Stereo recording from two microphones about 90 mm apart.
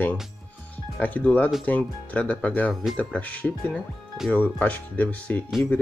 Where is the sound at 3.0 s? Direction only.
15° left (ahead or behind).